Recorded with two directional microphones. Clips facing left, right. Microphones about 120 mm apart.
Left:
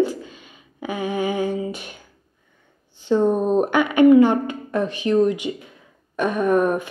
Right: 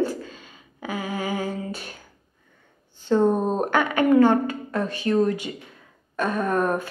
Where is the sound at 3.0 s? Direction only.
10° left (ahead or behind).